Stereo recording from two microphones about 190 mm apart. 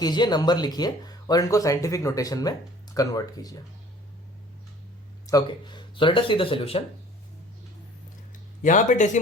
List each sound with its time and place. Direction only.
0.0 s speech: 20° left (ahead or behind)
5.2 s speech: 20° left (ahead or behind)
8.6 s speech: 40° left (ahead or behind)